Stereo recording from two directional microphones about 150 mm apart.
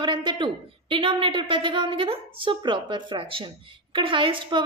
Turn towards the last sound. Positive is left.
turn(degrees=-35)  # may be behind; listen again after turning